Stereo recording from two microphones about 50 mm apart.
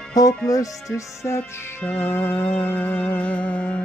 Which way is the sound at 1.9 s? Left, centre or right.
Left.